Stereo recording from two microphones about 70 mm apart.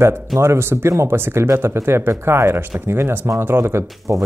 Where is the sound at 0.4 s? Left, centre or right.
Right.